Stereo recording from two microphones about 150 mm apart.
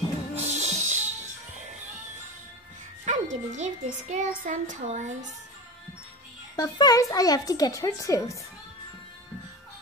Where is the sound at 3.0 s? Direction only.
50° right (ahead or behind).